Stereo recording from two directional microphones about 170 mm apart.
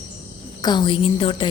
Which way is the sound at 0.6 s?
25° left (ahead or behind).